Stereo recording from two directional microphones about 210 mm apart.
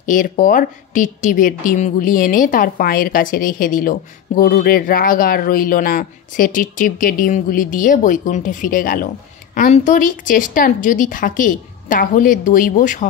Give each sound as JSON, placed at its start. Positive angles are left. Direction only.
{"t": 0.0, "sound": "speech", "side_deg": 40}